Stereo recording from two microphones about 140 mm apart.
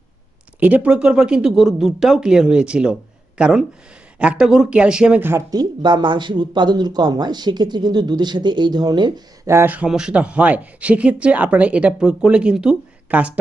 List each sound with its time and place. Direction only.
0.6 s speech: 10° right (ahead or behind)
5.5 s speech: 30° right (ahead or behind); by 13.3 s 5° right (ahead or behind)